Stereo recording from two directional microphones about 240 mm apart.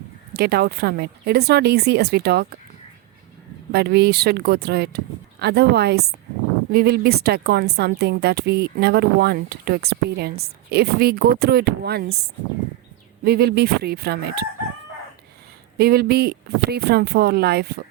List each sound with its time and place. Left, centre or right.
0.3 s a woman's voice: right
3.7 s a woman's voice: right
13.2 s a woman's voice: right
15.8 s a woman's voice: right